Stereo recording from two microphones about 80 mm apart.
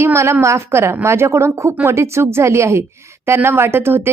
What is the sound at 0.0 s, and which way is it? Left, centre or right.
A woman's voice, right.